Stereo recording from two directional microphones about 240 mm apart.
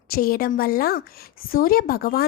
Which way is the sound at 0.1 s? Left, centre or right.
Left.